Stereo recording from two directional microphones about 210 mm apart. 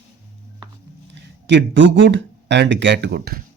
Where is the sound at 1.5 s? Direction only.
60° right (ahead or behind).